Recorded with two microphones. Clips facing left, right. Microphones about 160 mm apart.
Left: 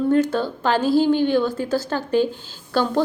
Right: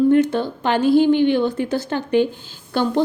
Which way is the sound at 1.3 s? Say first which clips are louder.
Right 1 dB; 20° right (ahead or behind).